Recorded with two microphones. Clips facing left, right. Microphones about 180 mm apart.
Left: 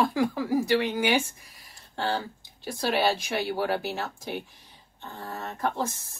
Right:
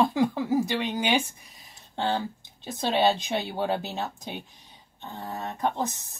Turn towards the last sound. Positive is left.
turn(degrees=-20)  # may be behind; listen again after turning